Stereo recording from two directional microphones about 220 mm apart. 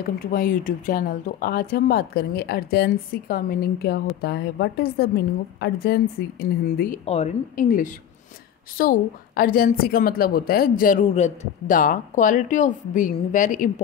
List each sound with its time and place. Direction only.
0.3 s speech: 40° left (ahead or behind)
7.1 s a woman's voice: 30° left (ahead or behind)